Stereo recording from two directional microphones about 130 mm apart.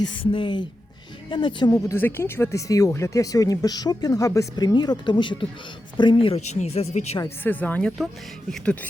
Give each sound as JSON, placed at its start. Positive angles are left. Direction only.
{"t": 0.0, "sound": "speech", "side_deg": 40}
{"t": 1.7, "sound": "speech", "side_deg": 20}
{"t": 7.3, "sound": "speech", "side_deg": 15}